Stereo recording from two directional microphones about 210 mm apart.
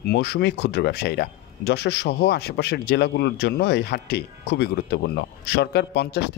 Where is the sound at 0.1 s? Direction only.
50° left (ahead or behind).